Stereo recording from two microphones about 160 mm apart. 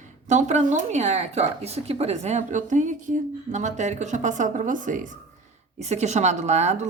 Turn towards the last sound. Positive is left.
turn(degrees=-45)  # may be behind; listen again after turning